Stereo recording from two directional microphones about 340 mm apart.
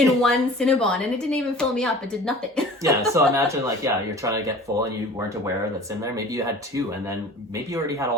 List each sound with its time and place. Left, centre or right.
0.0 s speech: centre
2.8 s speech: centre
6.0 s speech: centre